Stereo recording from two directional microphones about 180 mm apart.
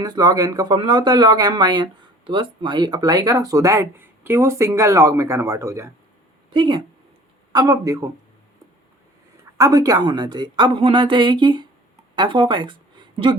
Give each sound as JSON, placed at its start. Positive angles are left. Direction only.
{"t": 0.0, "sound": "speech", "side_deg": -20}
{"t": 6.5, "sound": "speech", "side_deg": -25}
{"t": 9.6, "sound": "a woman's voice", "side_deg": -20}